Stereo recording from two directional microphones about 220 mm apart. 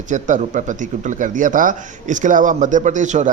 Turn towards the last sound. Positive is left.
turn(degrees=-35)  # may be behind; listen again after turning